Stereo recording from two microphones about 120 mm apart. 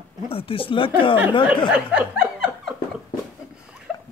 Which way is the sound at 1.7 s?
10° right (ahead or behind).